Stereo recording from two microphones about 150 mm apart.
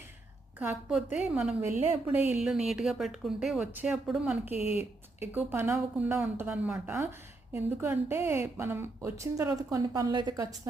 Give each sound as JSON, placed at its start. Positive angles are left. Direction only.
{"t": 0.6, "sound": "a woman's voice", "side_deg": -10}
{"t": 4.6, "sound": "speech", "side_deg": 45}
{"t": 5.2, "sound": "a woman's voice", "side_deg": -10}